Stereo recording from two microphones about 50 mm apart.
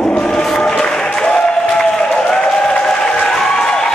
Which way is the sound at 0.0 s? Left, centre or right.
Centre.